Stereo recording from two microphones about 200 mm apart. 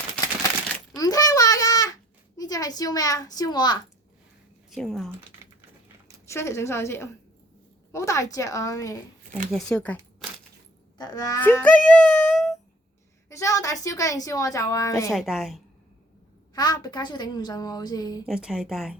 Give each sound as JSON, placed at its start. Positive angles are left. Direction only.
{"t": 0.9, "sound": "babbling", "side_deg": 20}
{"t": 2.4, "sound": "a woman's voice", "side_deg": 20}
{"t": 4.7, "sound": "speech", "side_deg": 0}
{"t": 6.2, "sound": "speech", "side_deg": 15}
{"t": 9.5, "sound": "speech", "side_deg": 5}
{"t": 10.9, "sound": "speech", "side_deg": 20}
{"t": 11.3, "sound": "speech", "side_deg": 10}
{"t": 13.3, "sound": "a woman's voice", "side_deg": 15}
{"t": 15.1, "sound": "speech", "side_deg": 0}
{"t": 16.6, "sound": "a woman's voice", "side_deg": 20}
{"t": 18.3, "sound": "speech", "side_deg": -5}